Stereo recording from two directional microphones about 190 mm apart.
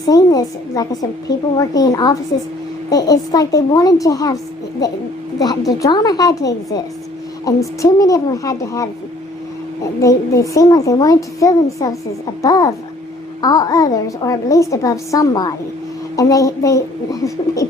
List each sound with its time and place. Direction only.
0.0 s a woman's voice: 20° left (ahead or behind)
5.4 s a woman's voice: 20° left (ahead or behind)
10.0 s a child's voice: 15° left (ahead or behind)